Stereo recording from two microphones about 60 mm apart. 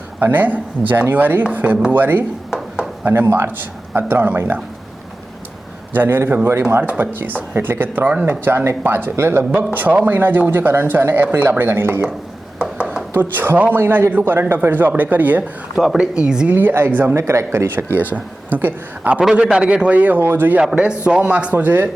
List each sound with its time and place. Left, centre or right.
0.2 s a man's voice: right
5.9 s speech: right
6.5 s speech: right
6.8 s speech: right
12.7 s chopping: centre
13.1 s speech: right
16.0 s speech: centre
16.5 s speech: right
17.2 s speech: right
18.1 s a man's voice: right
19.3 s a man's voice: centre; by 20.6 s right
20.7 s a man's voice: centre
21.5 s speech: right